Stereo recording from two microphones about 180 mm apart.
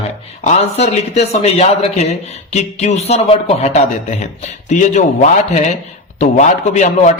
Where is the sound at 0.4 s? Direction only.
40° left (ahead or behind).